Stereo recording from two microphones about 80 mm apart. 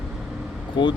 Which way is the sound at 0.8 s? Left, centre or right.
Left.